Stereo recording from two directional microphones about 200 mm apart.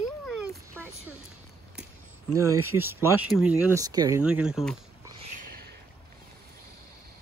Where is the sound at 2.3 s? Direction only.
15° right (ahead or behind).